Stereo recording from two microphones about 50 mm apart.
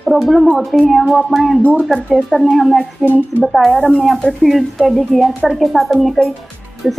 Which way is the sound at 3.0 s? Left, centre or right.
Right.